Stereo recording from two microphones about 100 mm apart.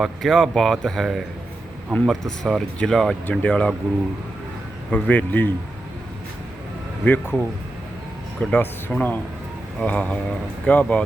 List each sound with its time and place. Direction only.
0.0 s speech: centre (ahead or behind)
3.2 s speech: 15° left (ahead or behind)
4.9 s speech: 15° left (ahead or behind)
7.0 s speech: 15° left (ahead or behind)